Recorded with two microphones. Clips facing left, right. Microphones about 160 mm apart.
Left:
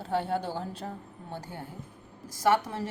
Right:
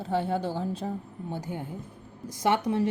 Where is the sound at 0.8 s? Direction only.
5° right (ahead or behind).